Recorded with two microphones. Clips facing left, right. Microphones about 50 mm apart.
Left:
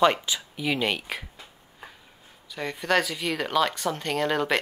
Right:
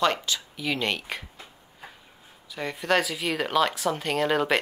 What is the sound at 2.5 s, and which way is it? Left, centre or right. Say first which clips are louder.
Speech: even; centre.